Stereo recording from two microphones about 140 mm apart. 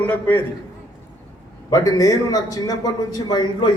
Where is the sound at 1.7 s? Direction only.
25° left (ahead or behind).